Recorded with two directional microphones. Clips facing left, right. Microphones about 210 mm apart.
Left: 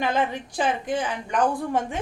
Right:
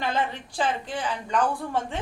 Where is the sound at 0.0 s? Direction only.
15° left (ahead or behind).